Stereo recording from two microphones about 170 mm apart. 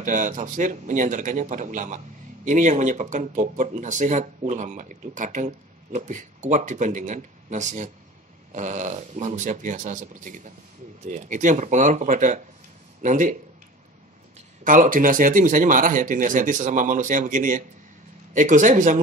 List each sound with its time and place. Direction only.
0.0 s speech: 50° right (ahead or behind)
14.6 s speech: 50° right (ahead or behind)